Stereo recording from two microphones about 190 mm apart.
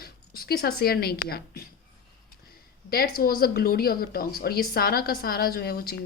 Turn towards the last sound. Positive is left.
turn(degrees=50)  # may be behind; listen again after turning